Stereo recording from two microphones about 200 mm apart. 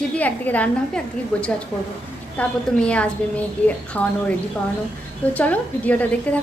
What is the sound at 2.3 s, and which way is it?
A woman's voice, 5° left (ahead or behind).